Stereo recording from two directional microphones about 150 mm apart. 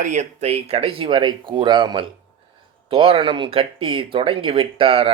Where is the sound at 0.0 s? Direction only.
50° right (ahead or behind).